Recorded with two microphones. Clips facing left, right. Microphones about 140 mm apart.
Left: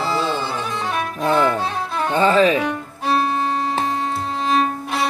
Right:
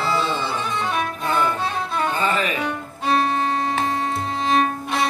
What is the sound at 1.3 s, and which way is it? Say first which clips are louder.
Music: left 5 dB; 90° left.